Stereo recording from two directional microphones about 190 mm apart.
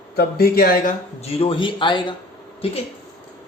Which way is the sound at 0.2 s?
55° left (ahead or behind).